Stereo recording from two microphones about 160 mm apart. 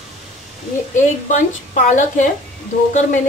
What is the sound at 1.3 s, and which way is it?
A woman's voice, 50° left (ahead or behind).